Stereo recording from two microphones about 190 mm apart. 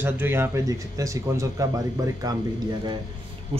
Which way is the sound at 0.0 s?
10° right (ahead or behind).